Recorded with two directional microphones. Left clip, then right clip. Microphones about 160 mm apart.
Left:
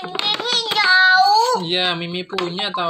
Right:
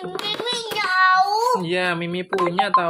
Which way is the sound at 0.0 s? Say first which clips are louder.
Left 5 dB; 5° right (ahead or behind).